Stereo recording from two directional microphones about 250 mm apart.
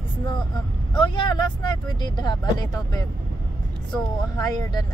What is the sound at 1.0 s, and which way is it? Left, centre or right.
Speech, centre.